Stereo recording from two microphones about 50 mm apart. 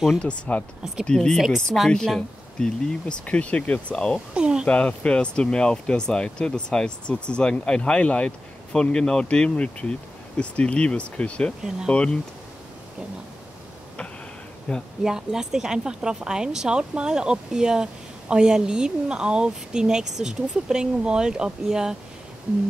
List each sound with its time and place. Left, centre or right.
0.2 s speech: left
3.3 s speech: left
4.3 s speech: centre
4.6 s speech: left
14.7 s speech: centre
15.0 s speech: centre